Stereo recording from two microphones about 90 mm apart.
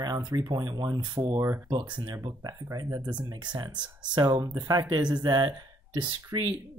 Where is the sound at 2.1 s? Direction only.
40° right (ahead or behind).